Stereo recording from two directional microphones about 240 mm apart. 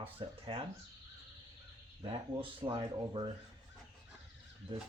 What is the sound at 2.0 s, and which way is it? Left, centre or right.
Speech, right.